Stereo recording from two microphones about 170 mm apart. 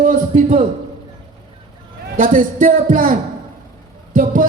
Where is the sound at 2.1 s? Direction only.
50° right (ahead or behind).